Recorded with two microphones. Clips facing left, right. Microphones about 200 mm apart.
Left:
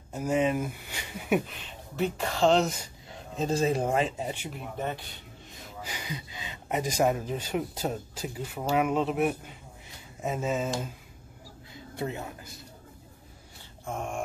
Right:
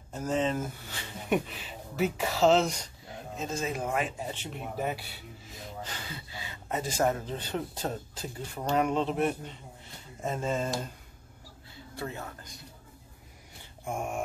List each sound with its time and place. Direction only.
0.1 s speech: 10° left (ahead or behind)
1.4 s speech: centre (ahead or behind)
3.3 s speech: 35° left (ahead or behind)
4.3 s speech: 10° left (ahead or behind)
4.6 s speech: 5° right (ahead or behind)
5.8 s speech: 10° left (ahead or behind)
11.7 s a sound: 20° left (ahead or behind)
13.8 s speech: 10° right (ahead or behind)